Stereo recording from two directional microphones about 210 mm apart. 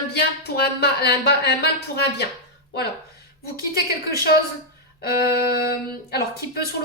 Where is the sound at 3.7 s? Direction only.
45° left (ahead or behind).